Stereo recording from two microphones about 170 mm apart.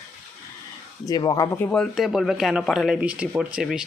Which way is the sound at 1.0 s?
20° left (ahead or behind).